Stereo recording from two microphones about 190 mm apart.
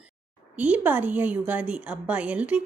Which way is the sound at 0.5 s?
5° right (ahead or behind).